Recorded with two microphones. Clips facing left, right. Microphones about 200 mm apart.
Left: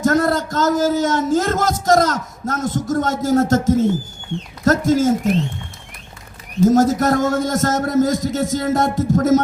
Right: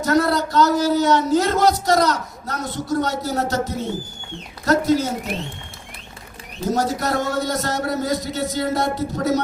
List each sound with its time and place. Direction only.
0.0 s a man's voice: 45° left (ahead or behind)
6.7 s a man's voice: 45° left (ahead or behind)